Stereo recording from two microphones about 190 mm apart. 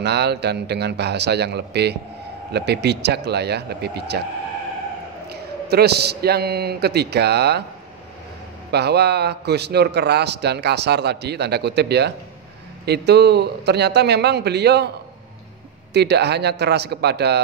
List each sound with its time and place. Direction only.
0.0 s a man's voice: 60° right (ahead or behind)
5.3 s a man's voice: 60° right (ahead or behind)
8.7 s a man's voice: 60° right (ahead or behind)
15.9 s a man's voice: 60° right (ahead or behind)